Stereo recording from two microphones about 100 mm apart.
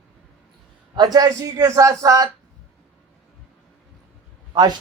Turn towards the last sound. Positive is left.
turn(degrees=-45)  # may be behind; listen again after turning